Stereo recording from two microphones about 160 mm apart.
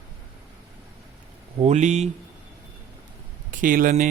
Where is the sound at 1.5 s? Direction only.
45° right (ahead or behind).